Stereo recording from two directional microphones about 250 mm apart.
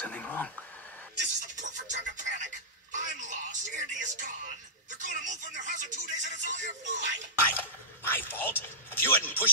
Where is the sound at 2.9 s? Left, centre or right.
Right.